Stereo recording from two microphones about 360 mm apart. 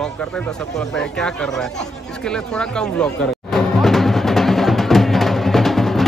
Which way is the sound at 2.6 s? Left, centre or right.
Centre.